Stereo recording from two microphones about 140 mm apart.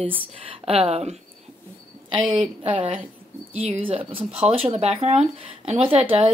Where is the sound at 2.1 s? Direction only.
35° right (ahead or behind).